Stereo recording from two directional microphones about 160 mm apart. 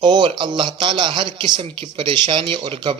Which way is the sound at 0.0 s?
30° right (ahead or behind).